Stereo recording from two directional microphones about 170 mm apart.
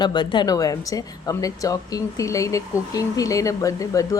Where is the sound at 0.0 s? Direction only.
25° left (ahead or behind).